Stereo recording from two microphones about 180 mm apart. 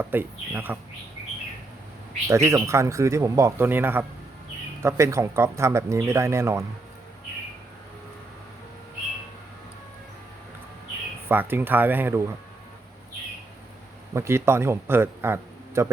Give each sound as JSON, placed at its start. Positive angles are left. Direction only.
{"t": 0.0, "sound": "speech", "side_deg": -10}
{"t": 2.2, "sound": "speech", "side_deg": -15}
{"t": 11.3, "sound": "speech", "side_deg": -10}
{"t": 14.1, "sound": "speech", "side_deg": -15}